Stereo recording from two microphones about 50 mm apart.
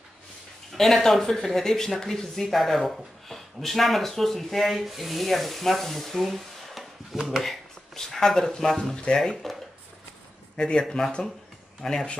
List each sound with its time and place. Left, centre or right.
0.7 s speech: centre
7.4 s speech: centre
10.5 s speech: centre